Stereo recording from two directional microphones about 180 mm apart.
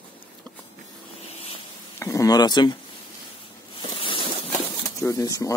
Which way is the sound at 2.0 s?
15° left (ahead or behind).